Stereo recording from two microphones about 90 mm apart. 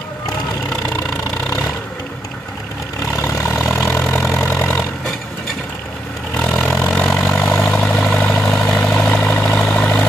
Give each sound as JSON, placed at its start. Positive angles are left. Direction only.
{"t": 3.2, "sound": "vehicle", "side_deg": 25}
{"t": 3.5, "sound": "vehicle", "side_deg": 10}
{"t": 4.1, "sound": "vehicle", "side_deg": 35}
{"t": 4.5, "sound": "vehicle", "side_deg": 20}
{"t": 6.6, "sound": "vehicle", "side_deg": 15}